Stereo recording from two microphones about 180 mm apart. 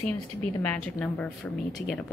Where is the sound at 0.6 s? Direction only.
5° left (ahead or behind).